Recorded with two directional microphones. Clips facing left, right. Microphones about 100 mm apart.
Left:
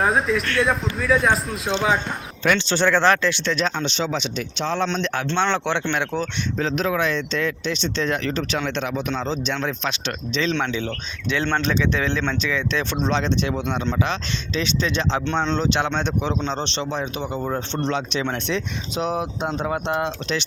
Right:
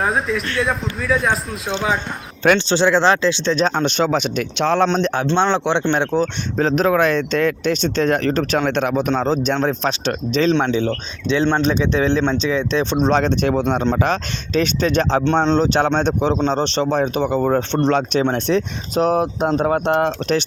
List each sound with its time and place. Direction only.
0.0 s a man's voice: centre (ahead or behind)
2.7 s speech: 20° right (ahead or behind)
3.8 s speech: 50° right (ahead or behind)
4.9 s speech: 40° right (ahead or behind)
5.1 s speech: 25° right (ahead or behind)
5.9 s speech: 30° right (ahead or behind)
6.6 s speech: 45° right (ahead or behind)
10.5 s speech: 30° right (ahead or behind)
13.1 s speech: 50° right (ahead or behind)
15.3 s speech: 35° right (ahead or behind)